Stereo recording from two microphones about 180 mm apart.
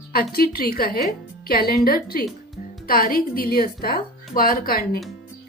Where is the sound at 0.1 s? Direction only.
55° left (ahead or behind).